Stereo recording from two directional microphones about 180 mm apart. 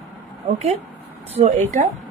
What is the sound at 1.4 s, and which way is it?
Speech, 45° right (ahead or behind).